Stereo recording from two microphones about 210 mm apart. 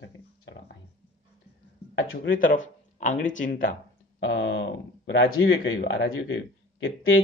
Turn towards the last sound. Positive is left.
turn(degrees=70)  # may be behind; listen again after turning